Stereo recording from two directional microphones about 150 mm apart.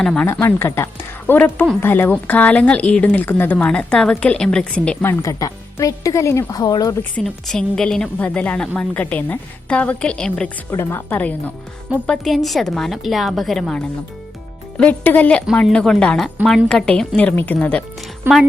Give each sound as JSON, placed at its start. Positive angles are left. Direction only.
{"t": 0.0, "sound": "a woman's voice", "side_deg": 5}
{"t": 0.3, "sound": "a woman's voice", "side_deg": 15}
{"t": 5.0, "sound": "speech", "side_deg": 20}
{"t": 7.2, "sound": "a woman's voice", "side_deg": 0}
{"t": 10.7, "sound": "a woman's voice", "side_deg": 15}
{"t": 18.3, "sound": "a woman's voice", "side_deg": -15}